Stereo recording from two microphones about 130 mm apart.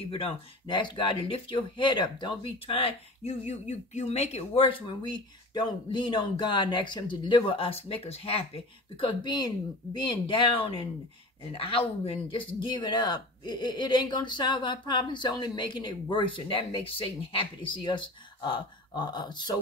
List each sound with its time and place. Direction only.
0.1 s speech: 45° left (ahead or behind)